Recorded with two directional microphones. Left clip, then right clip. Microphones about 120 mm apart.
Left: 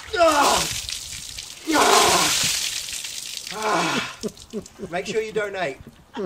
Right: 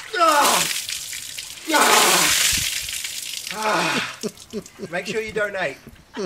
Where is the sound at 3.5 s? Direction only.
15° left (ahead or behind).